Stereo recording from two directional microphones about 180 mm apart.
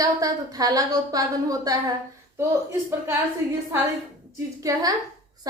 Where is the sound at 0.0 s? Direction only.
20° right (ahead or behind).